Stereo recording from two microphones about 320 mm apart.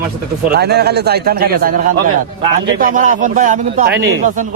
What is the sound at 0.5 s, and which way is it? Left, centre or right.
A man's voice, right.